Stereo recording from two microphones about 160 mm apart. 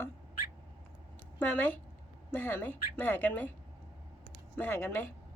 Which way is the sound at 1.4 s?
10° left (ahead or behind).